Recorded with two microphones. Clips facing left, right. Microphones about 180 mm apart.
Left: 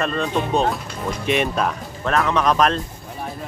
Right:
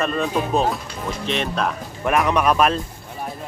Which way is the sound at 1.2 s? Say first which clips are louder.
Left 4 dB; 10° left (ahead or behind).